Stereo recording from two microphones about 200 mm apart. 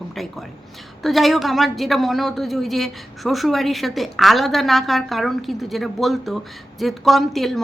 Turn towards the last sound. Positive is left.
turn(degrees=0)  # may be behind; listen again after turning